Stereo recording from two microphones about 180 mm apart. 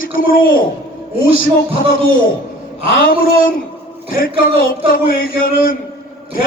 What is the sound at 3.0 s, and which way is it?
Speech, 55° left (ahead or behind).